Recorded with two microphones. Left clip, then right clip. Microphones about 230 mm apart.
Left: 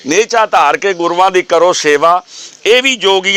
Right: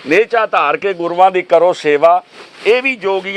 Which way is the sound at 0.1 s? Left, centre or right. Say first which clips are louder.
Left 2 dB; left.